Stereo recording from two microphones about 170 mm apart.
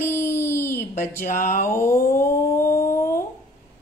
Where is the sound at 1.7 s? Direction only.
15° left (ahead or behind).